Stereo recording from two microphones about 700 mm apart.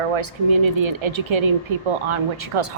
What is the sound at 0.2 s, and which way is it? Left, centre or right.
Speech, right.